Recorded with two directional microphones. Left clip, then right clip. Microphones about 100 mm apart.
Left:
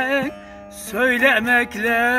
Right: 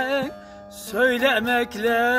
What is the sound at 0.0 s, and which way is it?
Music, 30° right (ahead or behind).